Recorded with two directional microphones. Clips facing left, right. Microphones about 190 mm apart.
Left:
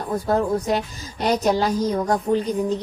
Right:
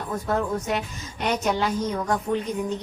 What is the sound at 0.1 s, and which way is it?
A woman's voice, 35° left (ahead or behind).